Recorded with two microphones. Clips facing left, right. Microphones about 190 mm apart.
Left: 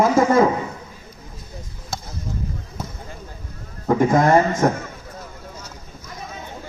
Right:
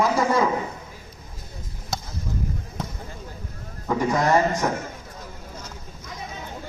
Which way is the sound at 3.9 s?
50° left (ahead or behind).